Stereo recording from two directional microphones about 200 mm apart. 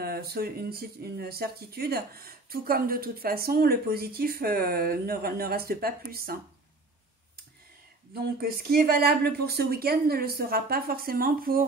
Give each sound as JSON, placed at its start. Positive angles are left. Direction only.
{"t": 0.0, "sound": "speech", "side_deg": -50}
{"t": 8.1, "sound": "speech", "side_deg": -50}